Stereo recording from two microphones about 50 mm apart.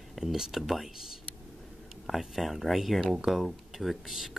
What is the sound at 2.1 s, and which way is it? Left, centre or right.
Speech, centre.